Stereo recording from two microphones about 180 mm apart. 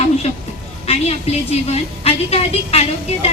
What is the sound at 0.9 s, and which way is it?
A woman's voice, 35° left (ahead or behind).